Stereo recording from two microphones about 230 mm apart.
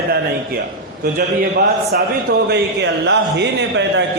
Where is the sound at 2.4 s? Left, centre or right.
Right.